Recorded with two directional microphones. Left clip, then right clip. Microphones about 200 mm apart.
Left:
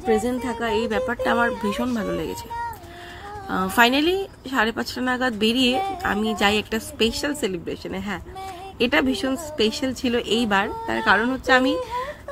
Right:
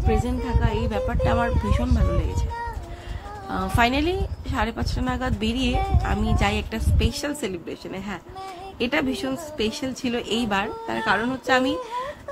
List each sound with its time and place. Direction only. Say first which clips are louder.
0.0 s a woman's voice: left 4 dB; 25° left (ahead or behind)
3.4 s a woman's voice: left 4 dB; 15° left (ahead or behind)